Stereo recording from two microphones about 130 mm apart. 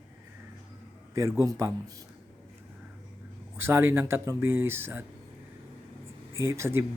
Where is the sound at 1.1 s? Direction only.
25° right (ahead or behind).